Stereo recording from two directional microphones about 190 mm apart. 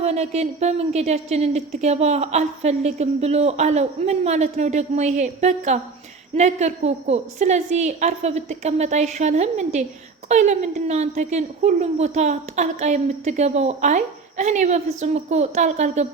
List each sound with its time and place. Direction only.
0.0 s a woman's voice: 35° right (ahead or behind)